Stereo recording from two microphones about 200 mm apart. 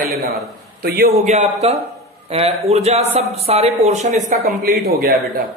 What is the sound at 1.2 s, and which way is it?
A woman's voice, 35° right (ahead or behind).